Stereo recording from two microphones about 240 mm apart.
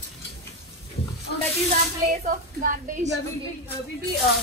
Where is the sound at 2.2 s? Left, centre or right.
Right.